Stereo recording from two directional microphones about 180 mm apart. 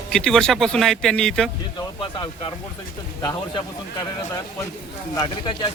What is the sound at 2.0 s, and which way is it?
A man's voice, 25° left (ahead or behind).